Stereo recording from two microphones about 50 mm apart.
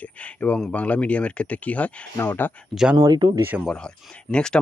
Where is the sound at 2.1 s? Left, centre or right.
Left.